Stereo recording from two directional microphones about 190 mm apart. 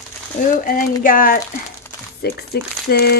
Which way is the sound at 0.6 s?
45° left (ahead or behind).